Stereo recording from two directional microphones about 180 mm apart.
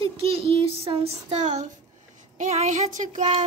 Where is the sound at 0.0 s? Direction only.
30° right (ahead or behind).